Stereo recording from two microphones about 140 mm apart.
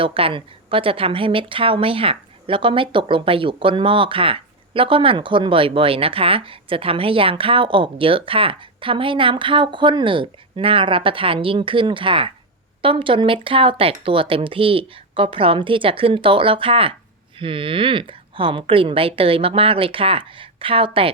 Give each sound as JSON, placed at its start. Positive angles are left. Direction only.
{"t": 0.0, "sound": "a woman's voice", "side_deg": -40}